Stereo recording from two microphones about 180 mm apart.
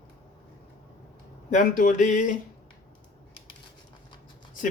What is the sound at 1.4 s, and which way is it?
Speech, 45° left (ahead or behind).